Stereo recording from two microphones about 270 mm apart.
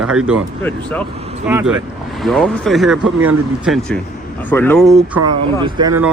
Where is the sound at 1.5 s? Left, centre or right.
Centre.